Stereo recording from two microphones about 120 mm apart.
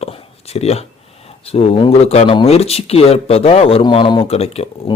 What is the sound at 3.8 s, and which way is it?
Speech, 40° left (ahead or behind).